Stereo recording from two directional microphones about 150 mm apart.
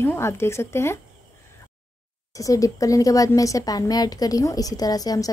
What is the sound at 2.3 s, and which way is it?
A woman's voice, 20° left (ahead or behind).